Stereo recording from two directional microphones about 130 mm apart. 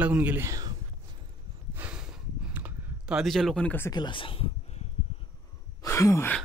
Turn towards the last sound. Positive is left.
turn(degrees=20)  # may be behind; listen again after turning